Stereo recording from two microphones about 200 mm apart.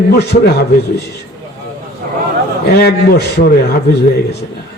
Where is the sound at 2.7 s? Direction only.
50° left (ahead or behind).